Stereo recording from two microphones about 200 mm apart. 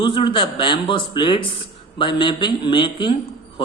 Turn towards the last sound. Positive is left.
turn(degrees=25)  # may be behind; listen again after turning